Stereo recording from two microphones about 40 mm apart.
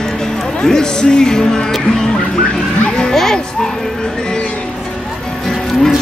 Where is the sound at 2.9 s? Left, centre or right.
Left.